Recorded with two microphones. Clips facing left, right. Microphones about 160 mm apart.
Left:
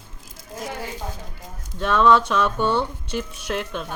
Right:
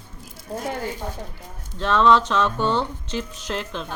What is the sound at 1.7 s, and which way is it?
Speech, 10° left (ahead or behind).